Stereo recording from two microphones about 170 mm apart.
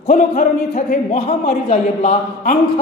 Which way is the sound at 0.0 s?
45° left (ahead or behind).